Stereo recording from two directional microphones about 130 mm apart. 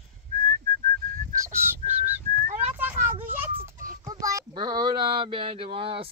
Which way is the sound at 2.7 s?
15° right (ahead or behind).